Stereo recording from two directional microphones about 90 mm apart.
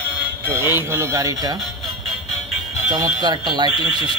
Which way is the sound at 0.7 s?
30° right (ahead or behind).